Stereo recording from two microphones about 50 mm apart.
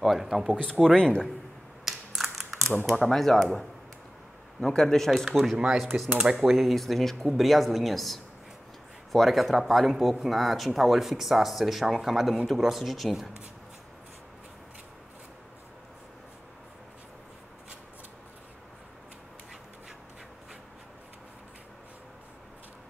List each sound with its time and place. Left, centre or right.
0.0 s speech: centre
0.9 s speech: centre
1.9 s typing: centre
3.0 s speech: centre
4.6 s speech: centre